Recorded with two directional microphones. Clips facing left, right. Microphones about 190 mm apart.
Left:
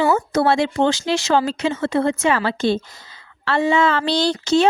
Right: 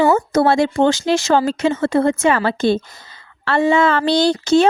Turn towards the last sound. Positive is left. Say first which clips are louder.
# right 3 dB
turn(degrees=-50)  # may be behind; listen again after turning